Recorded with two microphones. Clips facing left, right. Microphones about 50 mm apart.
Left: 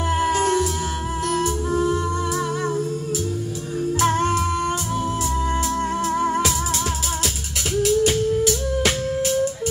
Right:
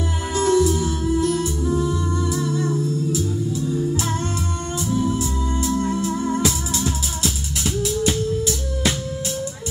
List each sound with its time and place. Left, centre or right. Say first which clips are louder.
0.2 s music: right 3 dB; left
3.7 s music: left 6 dB; left
4.1 s music: left 6 dB; left
6.4 s music: even; left